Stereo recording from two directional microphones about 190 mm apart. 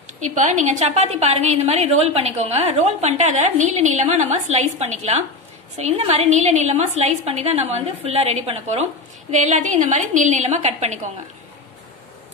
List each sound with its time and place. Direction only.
0.2 s a woman's voice: 40° right (ahead or behind)